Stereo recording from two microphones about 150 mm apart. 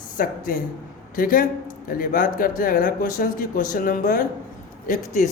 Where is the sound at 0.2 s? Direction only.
70° left (ahead or behind).